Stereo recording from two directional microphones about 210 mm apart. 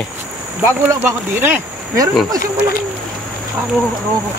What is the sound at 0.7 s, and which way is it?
Speech, 10° right (ahead or behind).